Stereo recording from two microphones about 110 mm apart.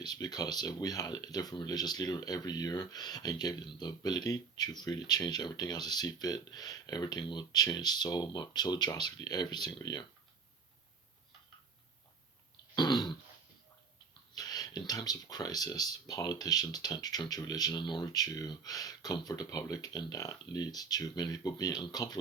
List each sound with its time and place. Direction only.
0.0 s speech: 40° left (ahead or behind)
12.7 s throat clearing: 40° left (ahead or behind)
14.1 s speech: 35° left (ahead or behind)